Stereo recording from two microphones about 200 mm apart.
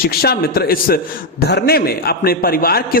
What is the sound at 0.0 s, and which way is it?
A man's voice, 50° left (ahead or behind).